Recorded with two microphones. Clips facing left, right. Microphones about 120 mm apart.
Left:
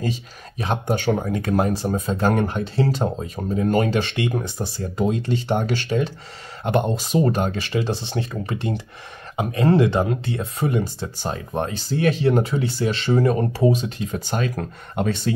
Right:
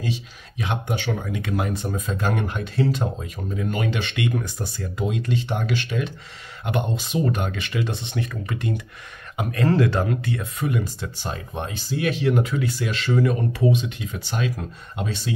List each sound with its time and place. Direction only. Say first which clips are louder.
0.0 s speech: left 2 dB; 40° left (ahead or behind)